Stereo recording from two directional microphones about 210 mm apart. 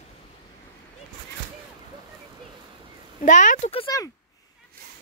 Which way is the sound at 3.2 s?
35° left (ahead or behind).